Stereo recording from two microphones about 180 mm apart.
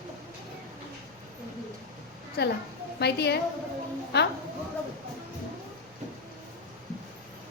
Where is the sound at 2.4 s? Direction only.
70° left (ahead or behind).